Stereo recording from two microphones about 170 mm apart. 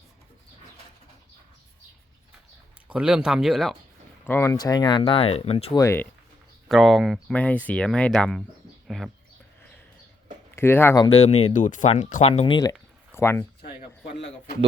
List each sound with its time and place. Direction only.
2.8 s speech: 5° right (ahead or behind)
4.3 s speech: 15° left (ahead or behind); by 5.7 s 35° left (ahead or behind)
5.7 s speech: 15° left (ahead or behind)
6.7 s speech: centre (ahead or behind)
10.5 s speech: 15° left (ahead or behind)
11.1 s speech: 40° left (ahead or behind)
12.3 s speech: 30° left (ahead or behind)
13.1 s speech: 15° left (ahead or behind)
14.2 s a sound: 90° left